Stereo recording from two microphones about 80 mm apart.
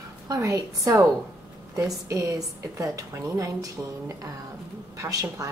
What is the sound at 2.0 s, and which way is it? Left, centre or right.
A woman's voice, right.